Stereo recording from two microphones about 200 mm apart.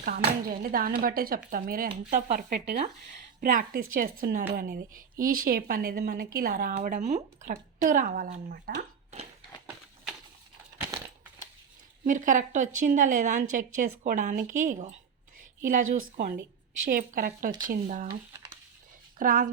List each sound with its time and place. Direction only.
0.0 s a woman's voice: 45° right (ahead or behind)
3.4 s a woman's voice: 45° right (ahead or behind)
12.0 s a woman's voice: 40° right (ahead or behind)
19.2 s a woman's voice: 45° right (ahead or behind)